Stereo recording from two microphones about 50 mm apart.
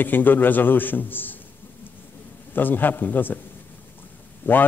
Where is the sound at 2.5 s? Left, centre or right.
Left.